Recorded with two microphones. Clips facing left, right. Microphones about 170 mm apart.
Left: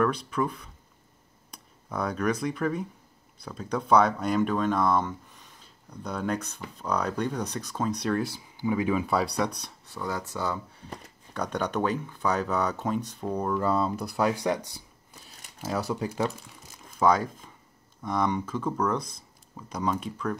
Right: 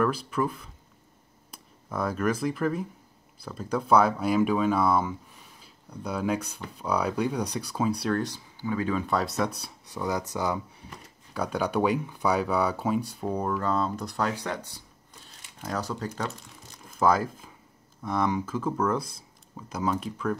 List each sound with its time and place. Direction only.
0.0 s speech: 5° right (ahead or behind)
8.5 s speech: 15° left (ahead or behind)
9.6 s speech: 15° right (ahead or behind)
13.6 s speech: 5° left (ahead or behind)